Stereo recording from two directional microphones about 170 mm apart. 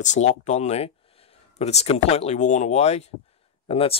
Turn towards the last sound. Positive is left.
turn(degrees=35)  # may be behind; listen again after turning